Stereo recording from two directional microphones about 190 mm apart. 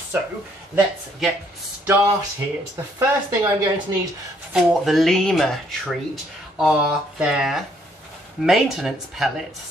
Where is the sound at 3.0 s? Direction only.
20° right (ahead or behind).